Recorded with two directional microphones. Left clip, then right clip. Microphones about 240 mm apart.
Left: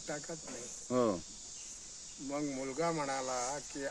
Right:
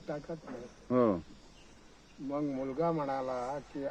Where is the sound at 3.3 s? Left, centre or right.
Left.